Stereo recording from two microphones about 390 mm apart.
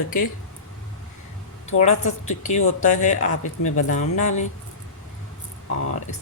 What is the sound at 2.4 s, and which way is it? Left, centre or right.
Speech, centre.